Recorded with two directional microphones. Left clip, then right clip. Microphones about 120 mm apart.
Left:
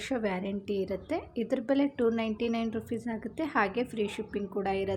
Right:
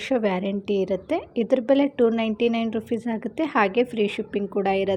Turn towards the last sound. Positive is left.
turn(degrees=-30)  # may be behind; listen again after turning